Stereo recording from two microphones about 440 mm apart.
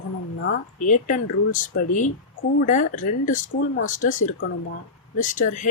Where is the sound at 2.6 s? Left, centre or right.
Centre.